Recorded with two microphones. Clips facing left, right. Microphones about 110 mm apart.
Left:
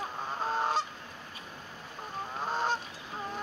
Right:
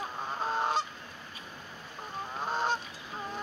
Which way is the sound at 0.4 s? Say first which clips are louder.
Even; 5° left (ahead or behind).